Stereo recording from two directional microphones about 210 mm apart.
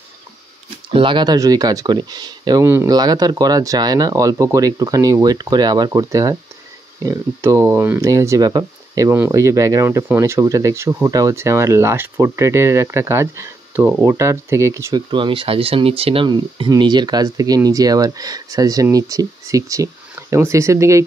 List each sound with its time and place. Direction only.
0.8 s speech: 25° right (ahead or behind)